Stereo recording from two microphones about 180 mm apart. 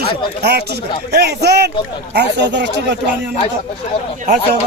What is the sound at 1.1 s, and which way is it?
Speech, 65° right (ahead or behind).